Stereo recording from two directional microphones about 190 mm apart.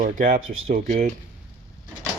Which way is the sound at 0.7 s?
45° right (ahead or behind).